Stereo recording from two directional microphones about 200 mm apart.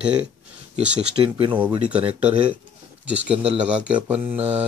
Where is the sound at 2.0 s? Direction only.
30° right (ahead or behind).